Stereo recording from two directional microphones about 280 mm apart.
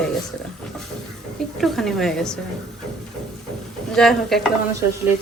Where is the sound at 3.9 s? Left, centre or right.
Centre.